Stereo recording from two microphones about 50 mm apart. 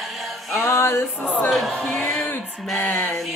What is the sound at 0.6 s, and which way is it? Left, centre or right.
Music, left.